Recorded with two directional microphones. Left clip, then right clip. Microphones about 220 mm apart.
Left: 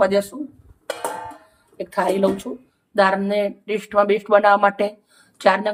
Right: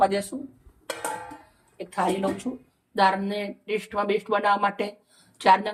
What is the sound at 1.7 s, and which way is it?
Speech, 25° left (ahead or behind).